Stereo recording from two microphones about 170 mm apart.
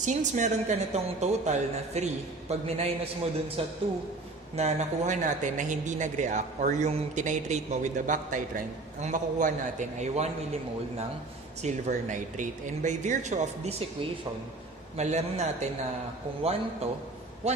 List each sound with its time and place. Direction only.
0.0 s speech: 45° right (ahead or behind)
11.6 s speech: 45° right (ahead or behind)
14.9 s a man's voice: 40° right (ahead or behind)